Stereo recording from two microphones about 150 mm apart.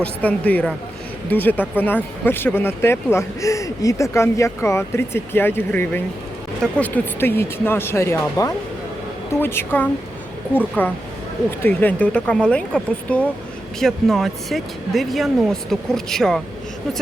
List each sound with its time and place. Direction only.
0.0 s speech: 10° left (ahead or behind)